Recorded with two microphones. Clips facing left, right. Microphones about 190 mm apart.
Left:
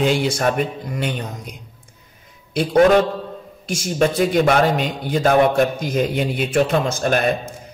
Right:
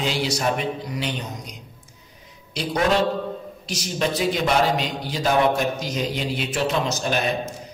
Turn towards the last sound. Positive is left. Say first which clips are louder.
# left 5 dB
turn(degrees=50)  # may be behind; listen again after turning